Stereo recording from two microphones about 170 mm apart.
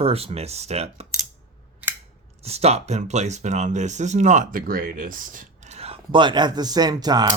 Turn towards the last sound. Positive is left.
turn(degrees=-25)  # may be behind; listen again after turning